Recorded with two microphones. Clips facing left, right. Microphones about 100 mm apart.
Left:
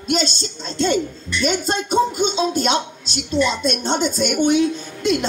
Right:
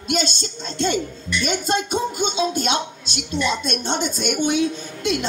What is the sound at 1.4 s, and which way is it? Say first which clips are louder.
A woman's voice: left 2 dB; 45° left (ahead or behind).